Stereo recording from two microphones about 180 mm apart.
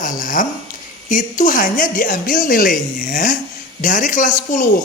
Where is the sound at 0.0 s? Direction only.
45° left (ahead or behind).